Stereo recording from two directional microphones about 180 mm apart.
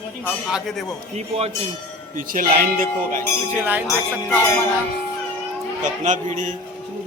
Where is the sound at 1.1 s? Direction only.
35° right (ahead or behind).